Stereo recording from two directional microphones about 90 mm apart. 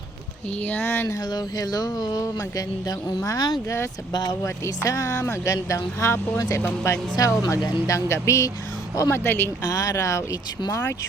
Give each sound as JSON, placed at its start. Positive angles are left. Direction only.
{"t": 0.6, "sound": "speech", "side_deg": 20}
{"t": 1.2, "sound": "speech", "side_deg": 50}
{"t": 4.4, "sound": "speech", "side_deg": 35}
{"t": 9.6, "sound": "speech", "side_deg": 35}